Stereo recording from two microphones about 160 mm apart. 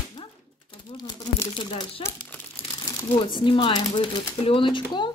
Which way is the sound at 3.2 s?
30° left (ahead or behind).